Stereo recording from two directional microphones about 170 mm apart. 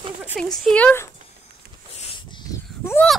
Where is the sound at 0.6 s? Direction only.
5° left (ahead or behind).